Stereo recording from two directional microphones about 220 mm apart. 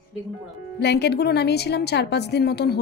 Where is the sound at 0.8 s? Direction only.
50° left (ahead or behind).